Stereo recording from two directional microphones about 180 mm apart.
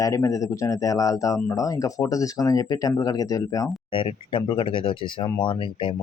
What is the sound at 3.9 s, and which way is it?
Speech, 30° left (ahead or behind).